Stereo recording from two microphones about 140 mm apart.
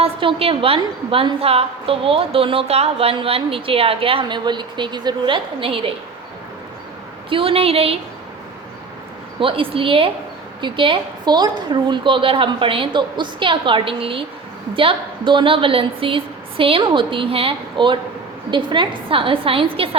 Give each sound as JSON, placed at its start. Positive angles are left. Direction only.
{"t": 0.0, "sound": "a woman's voice", "side_deg": -40}
{"t": 7.3, "sound": "a woman's voice", "side_deg": -40}
{"t": 9.4, "sound": "a woman's voice", "side_deg": -40}